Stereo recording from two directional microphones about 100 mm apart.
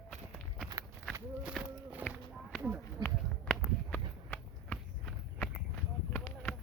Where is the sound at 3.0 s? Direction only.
10° left (ahead or behind).